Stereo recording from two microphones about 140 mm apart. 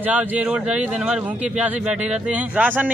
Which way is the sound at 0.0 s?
10° right (ahead or behind).